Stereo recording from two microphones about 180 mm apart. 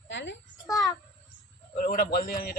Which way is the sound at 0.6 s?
20° left (ahead or behind).